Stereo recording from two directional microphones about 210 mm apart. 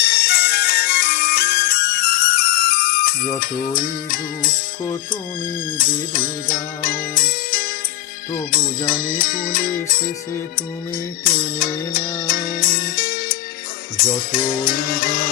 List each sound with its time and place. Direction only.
0.0 s music: 50° left (ahead or behind)
5.7 s music: 40° left (ahead or behind)
11.2 s music: 45° left (ahead or behind)